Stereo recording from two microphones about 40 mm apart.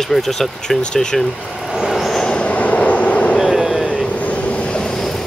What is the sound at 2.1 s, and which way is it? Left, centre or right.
Train, centre.